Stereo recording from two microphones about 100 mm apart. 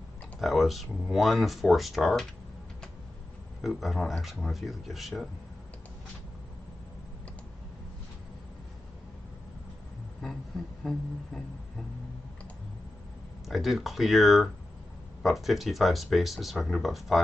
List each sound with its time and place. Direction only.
0.4 s speech: centre (ahead or behind)
3.6 s speech: centre (ahead or behind)
10.8 s speech: 5° left (ahead or behind)
13.5 s speech: centre (ahead or behind)